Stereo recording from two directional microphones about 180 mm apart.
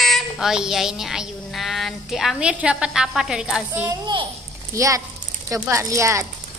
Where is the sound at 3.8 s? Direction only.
25° right (ahead or behind).